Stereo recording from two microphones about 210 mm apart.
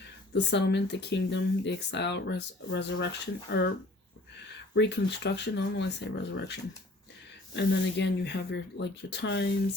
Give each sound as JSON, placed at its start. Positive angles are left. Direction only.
{"t": 0.3, "sound": "speech", "side_deg": 55}
{"t": 4.7, "sound": "speech", "side_deg": 55}